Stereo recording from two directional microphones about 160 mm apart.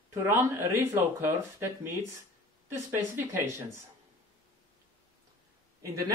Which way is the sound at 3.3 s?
15° right (ahead or behind).